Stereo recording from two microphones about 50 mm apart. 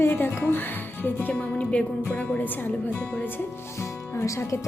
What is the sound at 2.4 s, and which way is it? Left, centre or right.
Speech, left.